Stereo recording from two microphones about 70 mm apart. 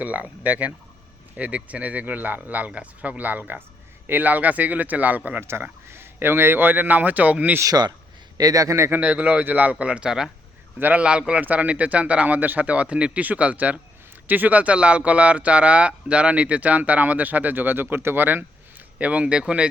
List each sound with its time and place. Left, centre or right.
0.0 s speech: right
5.4 s speech: right
7.6 s speech: right
8.4 s a man's voice: right
8.9 s speech: centre
10.8 s speech: right
11.0 s speech: centre
18.9 s speech: centre